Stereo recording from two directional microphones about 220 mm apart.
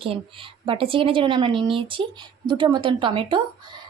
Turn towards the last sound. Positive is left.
turn(degrees=-20)  # may be behind; listen again after turning